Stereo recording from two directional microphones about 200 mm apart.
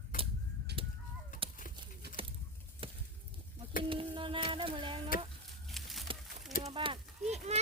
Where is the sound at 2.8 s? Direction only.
25° right (ahead or behind).